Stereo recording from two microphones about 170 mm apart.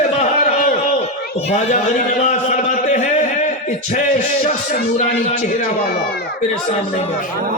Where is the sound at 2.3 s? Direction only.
45° left (ahead or behind).